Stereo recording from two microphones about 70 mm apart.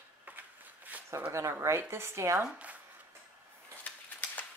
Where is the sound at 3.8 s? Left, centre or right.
Centre.